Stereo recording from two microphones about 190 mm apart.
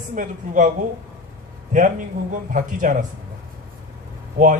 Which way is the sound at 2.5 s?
45° right (ahead or behind).